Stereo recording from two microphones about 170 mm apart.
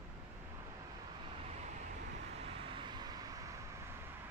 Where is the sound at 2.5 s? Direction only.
30° right (ahead or behind).